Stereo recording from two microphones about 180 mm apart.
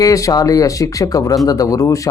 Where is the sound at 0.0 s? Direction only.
20° left (ahead or behind).